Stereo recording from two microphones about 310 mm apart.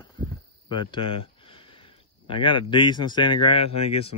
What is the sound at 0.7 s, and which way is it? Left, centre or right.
Speech, centre.